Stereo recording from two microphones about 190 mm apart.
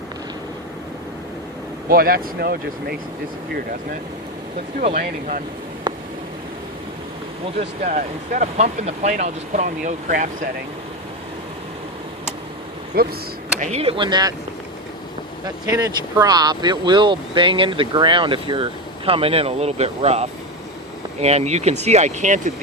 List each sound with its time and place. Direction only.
1.9 s speech: 50° right (ahead or behind)
4.8 s speech: 35° right (ahead or behind)
5.9 s a sound: 25° right (ahead or behind)
7.6 s speech: 40° right (ahead or behind)
12.9 s speech: 55° right (ahead or behind)
13.6 s speech: 35° right (ahead or behind)
15.4 s speech: 15° right (ahead or behind); by 22.5 s 40° right (ahead or behind)